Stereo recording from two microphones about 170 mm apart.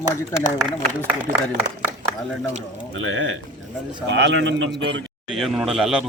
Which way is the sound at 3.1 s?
90° right.